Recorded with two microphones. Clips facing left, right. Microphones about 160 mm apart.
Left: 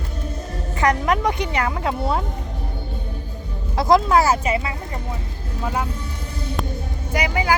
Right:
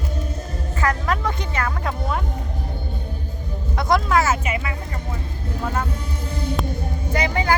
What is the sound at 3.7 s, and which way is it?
Speech, 30° left (ahead or behind).